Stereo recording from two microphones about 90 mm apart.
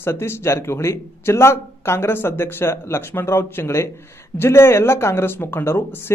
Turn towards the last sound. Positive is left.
turn(degrees=30)  # may be behind; listen again after turning